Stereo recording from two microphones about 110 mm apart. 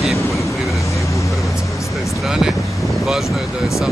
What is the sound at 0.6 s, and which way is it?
Vehicle, centre (ahead or behind).